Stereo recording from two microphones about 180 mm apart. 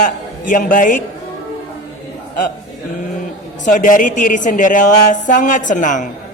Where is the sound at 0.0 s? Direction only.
45° left (ahead or behind).